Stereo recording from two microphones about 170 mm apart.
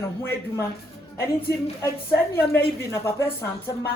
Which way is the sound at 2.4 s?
15° left (ahead or behind).